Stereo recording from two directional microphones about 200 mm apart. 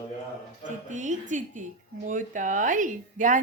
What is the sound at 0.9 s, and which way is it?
A woman's voice, 40° right (ahead or behind).